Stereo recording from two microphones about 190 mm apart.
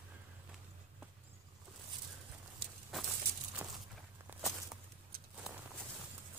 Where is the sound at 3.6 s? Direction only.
10° right (ahead or behind).